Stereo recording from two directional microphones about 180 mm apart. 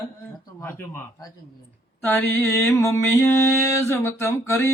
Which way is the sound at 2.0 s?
10° left (ahead or behind).